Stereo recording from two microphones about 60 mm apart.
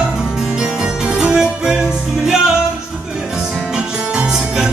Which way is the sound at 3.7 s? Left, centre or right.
Centre.